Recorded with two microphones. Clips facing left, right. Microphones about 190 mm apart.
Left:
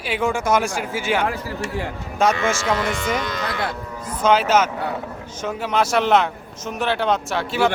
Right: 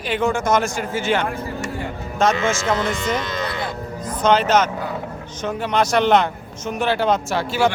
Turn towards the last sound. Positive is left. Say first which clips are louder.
# right 1 dB
turn(degrees=0)  # may be behind; listen again after turning